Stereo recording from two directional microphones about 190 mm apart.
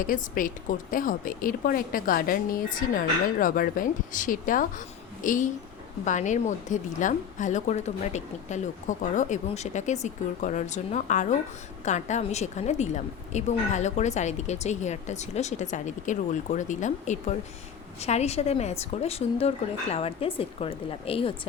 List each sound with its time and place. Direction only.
0.0 s a woman's voice: 45° left (ahead or behind); by 21.3 s 30° left (ahead or behind)